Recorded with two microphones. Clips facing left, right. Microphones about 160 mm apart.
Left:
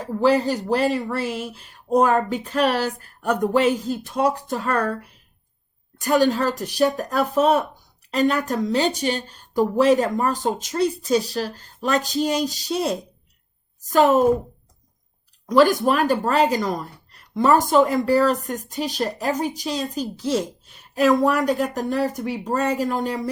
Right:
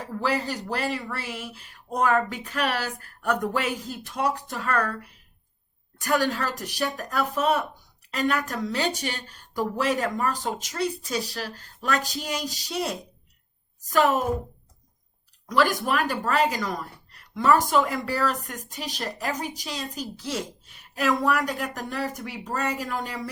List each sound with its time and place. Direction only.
0.1 s speech: 30° left (ahead or behind)
6.1 s speech: 25° left (ahead or behind)
15.4 s speech: 25° left (ahead or behind)